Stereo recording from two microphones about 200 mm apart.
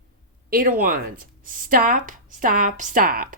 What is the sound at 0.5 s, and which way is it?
Speech, 45° right (ahead or behind).